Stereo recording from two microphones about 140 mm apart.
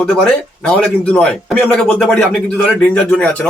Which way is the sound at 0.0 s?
5° left (ahead or behind).